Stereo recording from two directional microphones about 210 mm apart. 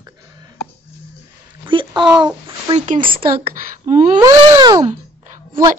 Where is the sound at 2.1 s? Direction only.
25° right (ahead or behind).